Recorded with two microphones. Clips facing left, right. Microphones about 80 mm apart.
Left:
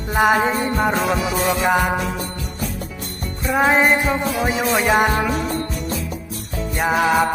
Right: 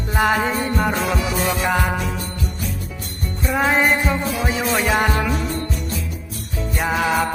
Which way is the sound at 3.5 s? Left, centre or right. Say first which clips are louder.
Left 2 dB; centre.